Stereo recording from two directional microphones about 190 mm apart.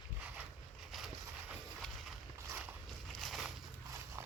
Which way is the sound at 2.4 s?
15° right (ahead or behind).